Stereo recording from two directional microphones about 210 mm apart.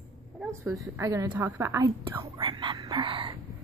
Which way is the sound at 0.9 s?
15° right (ahead or behind).